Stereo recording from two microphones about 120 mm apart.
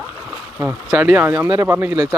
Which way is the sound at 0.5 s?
15° right (ahead or behind).